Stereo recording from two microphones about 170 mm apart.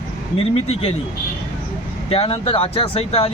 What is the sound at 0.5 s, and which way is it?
Speech, 40° left (ahead or behind).